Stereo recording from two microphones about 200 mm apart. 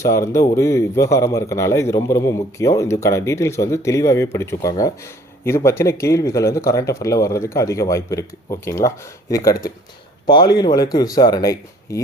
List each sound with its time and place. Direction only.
0.0 s a man's voice: 15° left (ahead or behind)